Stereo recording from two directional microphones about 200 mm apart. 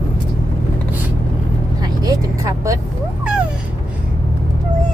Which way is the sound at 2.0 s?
15° right (ahead or behind).